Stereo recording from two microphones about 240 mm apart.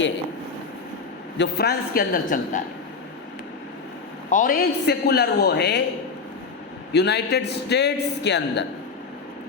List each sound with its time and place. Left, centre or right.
1.4 s a woman's voice: left
4.3 s a man's voice: left
6.9 s a man's voice: left